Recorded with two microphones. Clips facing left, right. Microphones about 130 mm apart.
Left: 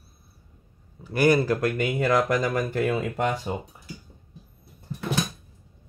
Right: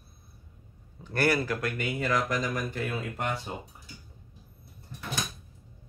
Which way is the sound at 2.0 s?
60° left (ahead or behind).